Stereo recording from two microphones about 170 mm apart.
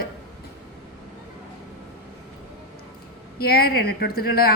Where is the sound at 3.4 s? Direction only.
65° left (ahead or behind).